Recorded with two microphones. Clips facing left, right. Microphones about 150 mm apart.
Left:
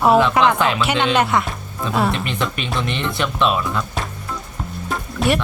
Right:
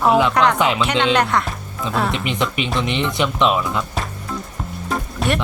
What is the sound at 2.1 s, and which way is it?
Speech, 15° right (ahead or behind).